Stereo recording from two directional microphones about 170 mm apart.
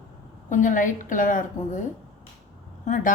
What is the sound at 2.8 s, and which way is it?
Speech, 50° left (ahead or behind).